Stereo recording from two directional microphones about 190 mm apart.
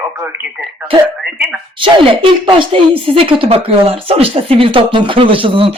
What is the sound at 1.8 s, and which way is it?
Speech, 25° right (ahead or behind).